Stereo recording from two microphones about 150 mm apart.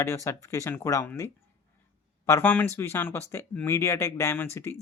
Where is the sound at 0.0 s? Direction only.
20° left (ahead or behind).